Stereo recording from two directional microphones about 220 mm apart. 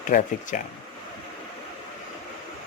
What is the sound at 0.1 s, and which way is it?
Speech, 35° left (ahead or behind).